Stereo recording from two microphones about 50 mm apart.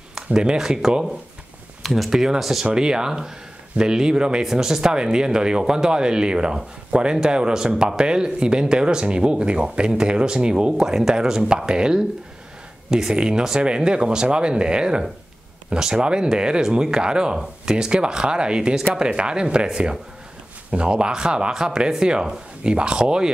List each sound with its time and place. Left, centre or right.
0.1 s speech: centre
13.1 s speech: centre